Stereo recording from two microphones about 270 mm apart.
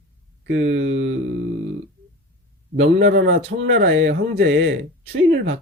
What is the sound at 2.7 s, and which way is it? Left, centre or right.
Speech, right.